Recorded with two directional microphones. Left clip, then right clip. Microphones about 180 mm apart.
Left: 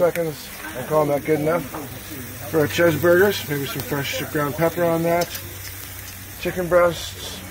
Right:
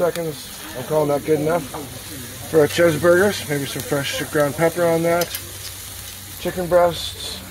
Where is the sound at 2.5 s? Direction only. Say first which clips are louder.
Right 3 dB; 35° right (ahead or behind).